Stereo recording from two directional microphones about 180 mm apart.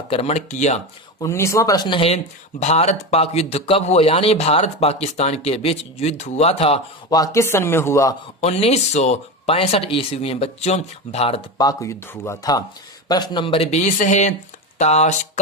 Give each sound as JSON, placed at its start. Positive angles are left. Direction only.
{"t": 0.1, "sound": "speech", "side_deg": 35}
{"t": 1.2, "sound": "speech", "side_deg": 15}
{"t": 7.1, "sound": "speech", "side_deg": 20}
{"t": 8.4, "sound": "speech", "side_deg": 35}
{"t": 11.5, "sound": "speech", "side_deg": 20}